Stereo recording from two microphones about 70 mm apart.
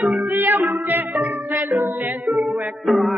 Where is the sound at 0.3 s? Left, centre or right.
Right.